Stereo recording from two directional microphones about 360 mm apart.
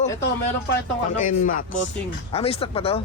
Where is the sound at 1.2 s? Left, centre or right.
Left.